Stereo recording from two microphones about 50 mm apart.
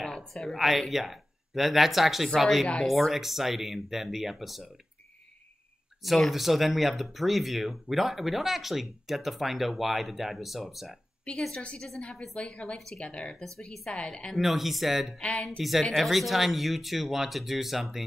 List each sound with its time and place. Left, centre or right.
0.3 s speech: centre
6.0 s speech: centre
11.5 s a woman's voice: centre
14.3 s speech: centre
15.1 s a woman's voice: left
15.4 s speech: centre